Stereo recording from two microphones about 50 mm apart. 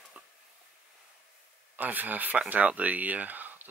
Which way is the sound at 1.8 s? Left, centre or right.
Right.